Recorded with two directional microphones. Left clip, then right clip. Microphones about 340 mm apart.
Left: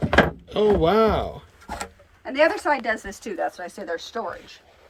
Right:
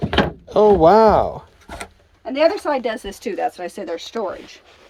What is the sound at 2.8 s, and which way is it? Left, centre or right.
Speech, right.